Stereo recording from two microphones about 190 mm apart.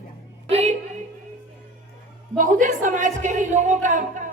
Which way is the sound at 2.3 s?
45° right (ahead or behind).